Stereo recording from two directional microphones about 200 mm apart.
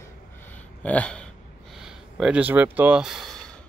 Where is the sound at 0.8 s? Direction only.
5° left (ahead or behind).